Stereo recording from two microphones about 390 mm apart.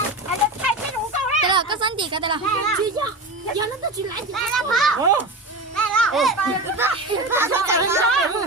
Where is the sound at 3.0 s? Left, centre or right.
Centre.